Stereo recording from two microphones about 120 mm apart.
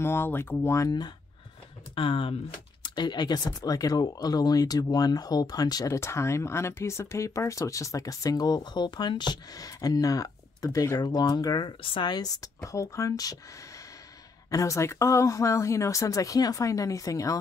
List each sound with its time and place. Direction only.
0.0 s speech: 20° left (ahead or behind)
2.0 s speech: 45° left (ahead or behind); by 13.4 s 30° left (ahead or behind)
14.5 s speech: 25° left (ahead or behind)